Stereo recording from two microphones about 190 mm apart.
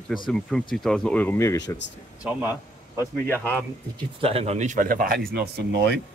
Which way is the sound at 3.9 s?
30° right (ahead or behind).